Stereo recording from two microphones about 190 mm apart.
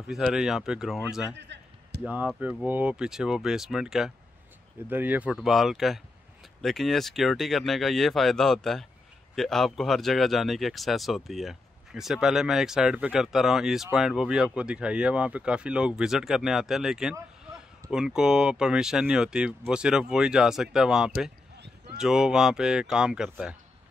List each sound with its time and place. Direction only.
0.1 s speech: 5° right (ahead or behind)
1.3 s a sound: 65° right (ahead or behind)
2.0 s speech: 5° right (ahead or behind)